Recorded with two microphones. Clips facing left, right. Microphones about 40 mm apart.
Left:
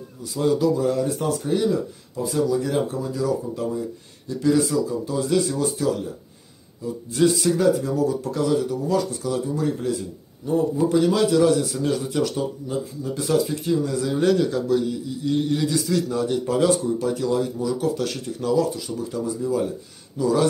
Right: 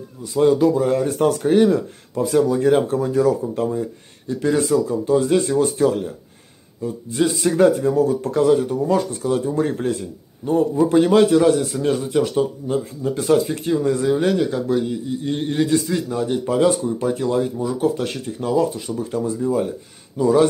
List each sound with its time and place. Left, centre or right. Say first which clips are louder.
0.2 s speech: right 5 dB; right
14.1 s speech: right 1 dB; centre; by 15.8 s right
15.8 s speech: even; centre
18.9 s speech: right 4 dB; right